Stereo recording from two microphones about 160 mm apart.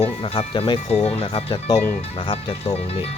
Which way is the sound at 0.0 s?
30° left (ahead or behind).